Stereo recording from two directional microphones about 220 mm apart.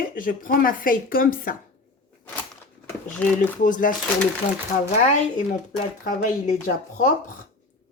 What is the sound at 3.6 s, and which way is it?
Speech, 35° left (ahead or behind).